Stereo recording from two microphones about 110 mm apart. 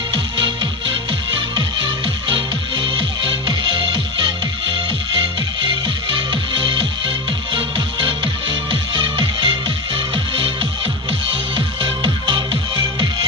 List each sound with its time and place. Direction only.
0.1 s music: 45° right (ahead or behind)
6.3 s music: 50° right (ahead or behind)